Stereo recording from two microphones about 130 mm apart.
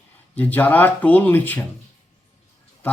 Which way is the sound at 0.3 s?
15° left (ahead or behind).